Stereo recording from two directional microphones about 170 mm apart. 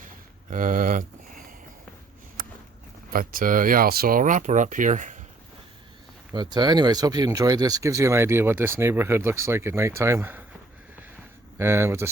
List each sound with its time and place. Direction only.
0.5 s speech: 50° right (ahead or behind)
3.1 s speech: 55° right (ahead or behind)
6.3 s speech: 25° right (ahead or behind)
11.5 s speech: 15° right (ahead or behind)